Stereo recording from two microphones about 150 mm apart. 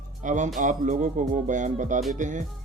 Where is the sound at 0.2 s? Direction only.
55° right (ahead or behind).